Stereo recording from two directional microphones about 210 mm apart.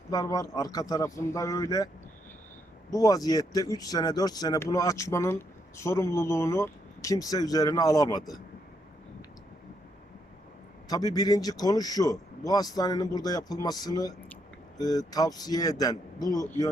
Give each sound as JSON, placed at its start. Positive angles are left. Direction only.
{"t": 0.1, "sound": "speech", "side_deg": 15}
{"t": 2.9, "sound": "speech", "side_deg": 15}
{"t": 10.8, "sound": "speech", "side_deg": 15}